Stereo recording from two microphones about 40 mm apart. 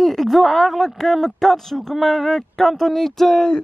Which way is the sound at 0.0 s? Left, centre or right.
Centre.